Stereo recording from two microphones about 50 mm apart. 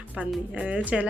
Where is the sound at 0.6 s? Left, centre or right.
Right.